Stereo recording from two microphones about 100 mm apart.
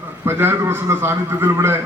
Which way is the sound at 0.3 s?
25° right (ahead or behind).